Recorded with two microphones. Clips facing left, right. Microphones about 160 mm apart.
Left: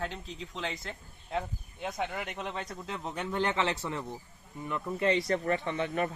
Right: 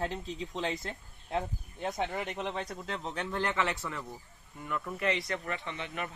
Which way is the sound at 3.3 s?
20° left (ahead or behind).